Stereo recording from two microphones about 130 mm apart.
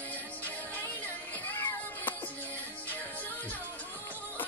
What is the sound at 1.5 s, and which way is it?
Music, 15° left (ahead or behind).